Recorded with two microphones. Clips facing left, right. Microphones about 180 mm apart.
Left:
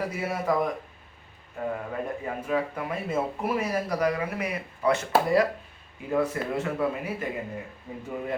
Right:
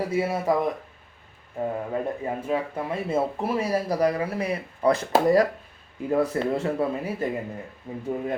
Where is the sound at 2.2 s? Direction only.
30° right (ahead or behind).